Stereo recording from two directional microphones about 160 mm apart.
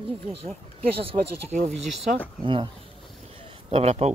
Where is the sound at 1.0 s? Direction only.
45° right (ahead or behind).